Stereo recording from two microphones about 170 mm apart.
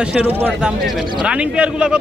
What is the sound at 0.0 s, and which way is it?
A man's voice, 5° right (ahead or behind).